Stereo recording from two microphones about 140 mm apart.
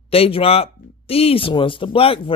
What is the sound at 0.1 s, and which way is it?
Speech, 45° left (ahead or behind).